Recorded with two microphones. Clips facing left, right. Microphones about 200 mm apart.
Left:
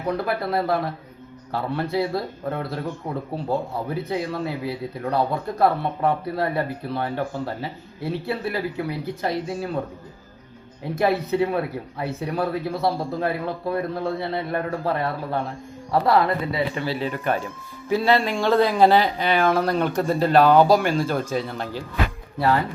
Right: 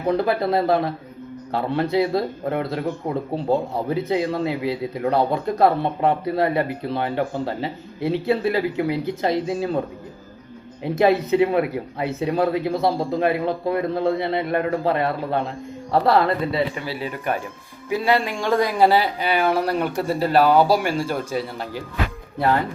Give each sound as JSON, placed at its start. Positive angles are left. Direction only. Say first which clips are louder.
{"t": 0.3, "sound": "speech", "louder": "right 4 dB", "side_deg": -25}
{"t": 10.8, "sound": "speech", "louder": "right 4 dB", "side_deg": -20}
{"t": 16.7, "sound": "speech", "louder": "left 2 dB", "side_deg": -10}